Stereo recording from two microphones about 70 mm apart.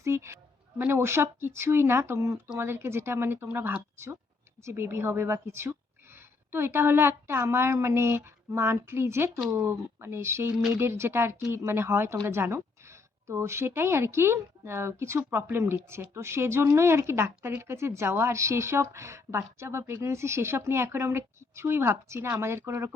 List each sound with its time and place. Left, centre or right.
0.0 s a sound: right
0.9 s speech: right
3.5 s a woman's voice: right